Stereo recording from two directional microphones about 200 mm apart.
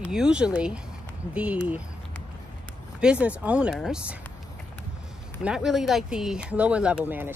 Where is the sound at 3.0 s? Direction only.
5° right (ahead or behind).